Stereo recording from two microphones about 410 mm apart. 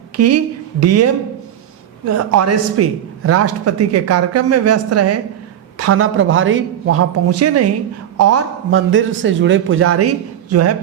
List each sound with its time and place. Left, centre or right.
0.2 s a man's voice: right